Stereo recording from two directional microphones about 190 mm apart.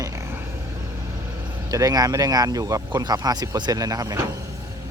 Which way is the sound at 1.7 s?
20° right (ahead or behind).